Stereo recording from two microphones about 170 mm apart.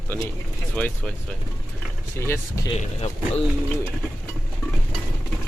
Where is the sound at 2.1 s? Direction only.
15° left (ahead or behind).